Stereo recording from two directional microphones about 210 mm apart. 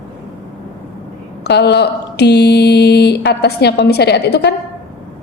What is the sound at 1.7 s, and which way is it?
A woman's voice, 55° left (ahead or behind).